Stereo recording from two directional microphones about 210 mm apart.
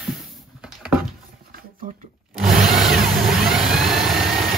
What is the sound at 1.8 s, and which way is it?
Shuffling cards, 40° right (ahead or behind).